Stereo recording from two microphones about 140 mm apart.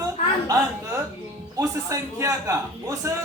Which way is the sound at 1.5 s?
25° right (ahead or behind).